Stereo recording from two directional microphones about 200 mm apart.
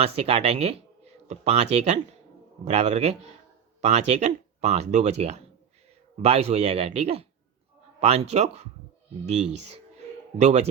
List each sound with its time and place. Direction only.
0.0 s speech: 30° right (ahead or behind)